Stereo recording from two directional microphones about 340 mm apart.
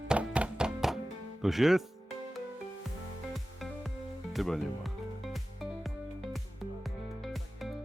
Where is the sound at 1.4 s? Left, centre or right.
Centre.